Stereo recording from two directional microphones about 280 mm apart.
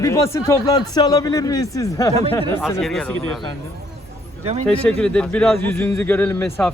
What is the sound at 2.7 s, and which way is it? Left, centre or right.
Speech, centre.